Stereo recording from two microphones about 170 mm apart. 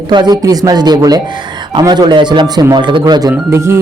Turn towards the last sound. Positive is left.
turn(degrees=-15)  # may be behind; listen again after turning